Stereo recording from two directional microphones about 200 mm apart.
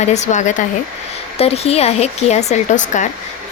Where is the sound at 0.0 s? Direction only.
35° left (ahead or behind).